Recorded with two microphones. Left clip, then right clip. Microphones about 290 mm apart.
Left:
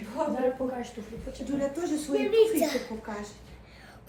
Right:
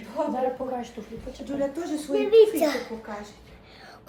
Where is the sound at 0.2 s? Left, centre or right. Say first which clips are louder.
Right 2 dB; centre.